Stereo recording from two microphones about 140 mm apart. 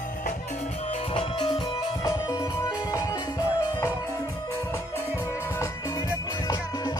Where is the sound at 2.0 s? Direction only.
25° left (ahead or behind).